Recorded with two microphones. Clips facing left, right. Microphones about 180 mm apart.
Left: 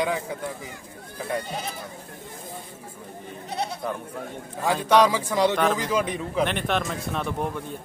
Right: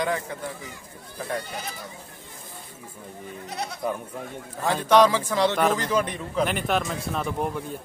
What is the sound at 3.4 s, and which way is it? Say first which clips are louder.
Goat: left 4 dB; 30° left (ahead or behind).